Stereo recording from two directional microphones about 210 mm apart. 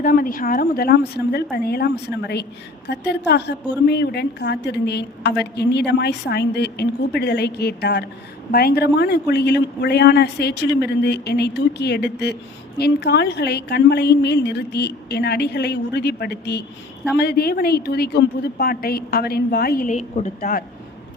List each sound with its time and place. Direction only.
0.0 s speech: 40° left (ahead or behind)
19.9 s a woman's voice: 35° left (ahead or behind)